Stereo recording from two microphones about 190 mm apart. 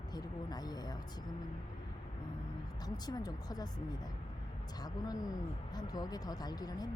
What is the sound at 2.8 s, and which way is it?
Speech, 20° left (ahead or behind).